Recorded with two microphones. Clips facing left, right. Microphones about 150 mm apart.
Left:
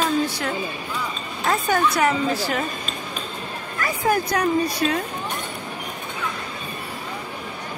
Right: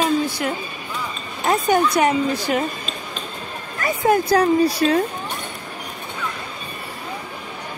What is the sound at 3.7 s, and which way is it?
Speech, 25° right (ahead or behind).